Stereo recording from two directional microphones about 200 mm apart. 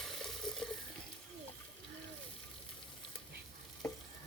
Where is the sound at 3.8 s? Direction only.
5° left (ahead or behind).